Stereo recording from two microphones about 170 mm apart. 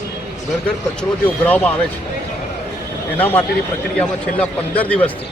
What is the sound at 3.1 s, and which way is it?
A man's voice, 10° left (ahead or behind).